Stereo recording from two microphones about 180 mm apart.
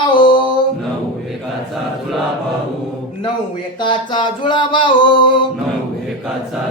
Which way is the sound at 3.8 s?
25° left (ahead or behind).